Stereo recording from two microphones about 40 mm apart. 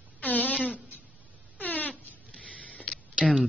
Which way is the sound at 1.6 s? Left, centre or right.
Left.